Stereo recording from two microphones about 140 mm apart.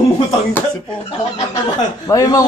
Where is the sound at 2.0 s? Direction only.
25° left (ahead or behind).